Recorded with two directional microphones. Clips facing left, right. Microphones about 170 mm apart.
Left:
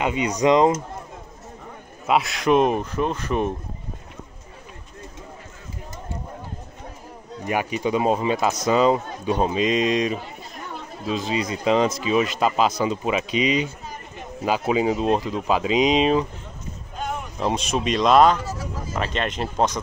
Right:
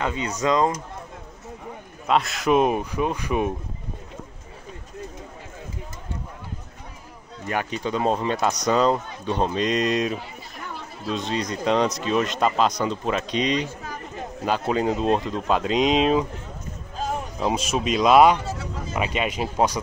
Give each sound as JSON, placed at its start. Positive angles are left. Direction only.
{"t": 0.0, "sound": "speech", "side_deg": 15}
{"t": 2.0, "sound": "speech", "side_deg": 5}
{"t": 7.4, "sound": "speech", "side_deg": 10}
{"t": 17.4, "sound": "speech", "side_deg": -5}